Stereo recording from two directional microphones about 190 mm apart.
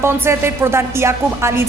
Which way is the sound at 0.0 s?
15° right (ahead or behind).